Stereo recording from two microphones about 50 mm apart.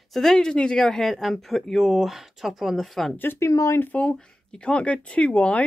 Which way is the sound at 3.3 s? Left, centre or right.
Left.